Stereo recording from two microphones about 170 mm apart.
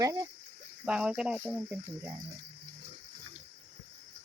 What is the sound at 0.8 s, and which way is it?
Speech, 5° right (ahead or behind).